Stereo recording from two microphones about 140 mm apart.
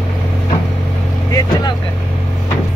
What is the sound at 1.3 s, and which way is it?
Vehicle, 25° left (ahead or behind).